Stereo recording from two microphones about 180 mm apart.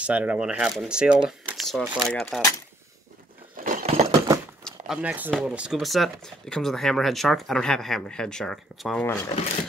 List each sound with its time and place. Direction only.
0.0 s speech: 5° right (ahead or behind)
3.5 s a sound: 45° right (ahead or behind)
4.6 s speech: 5° right (ahead or behind); by 9.3 s 10° left (ahead or behind)